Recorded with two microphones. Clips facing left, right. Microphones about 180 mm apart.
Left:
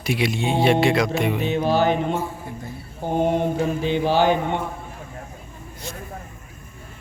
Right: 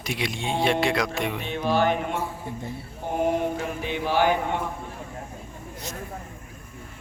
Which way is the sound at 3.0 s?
30° left (ahead or behind).